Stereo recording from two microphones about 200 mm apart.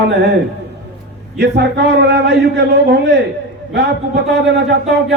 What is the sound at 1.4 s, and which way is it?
A man's voice, 60° right (ahead or behind).